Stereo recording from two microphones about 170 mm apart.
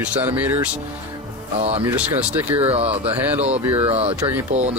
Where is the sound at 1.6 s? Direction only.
35° right (ahead or behind).